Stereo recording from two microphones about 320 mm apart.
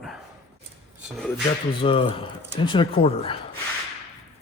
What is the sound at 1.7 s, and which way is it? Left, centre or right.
Speech, centre.